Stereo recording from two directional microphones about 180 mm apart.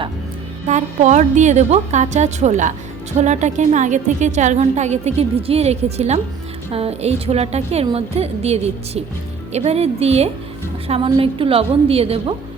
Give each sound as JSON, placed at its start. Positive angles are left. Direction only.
{"t": 0.7, "sound": "a woman's voice", "side_deg": -40}